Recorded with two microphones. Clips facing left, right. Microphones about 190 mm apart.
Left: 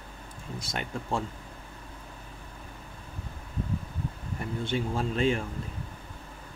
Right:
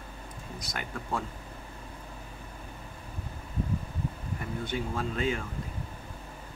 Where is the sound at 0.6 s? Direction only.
25° left (ahead or behind).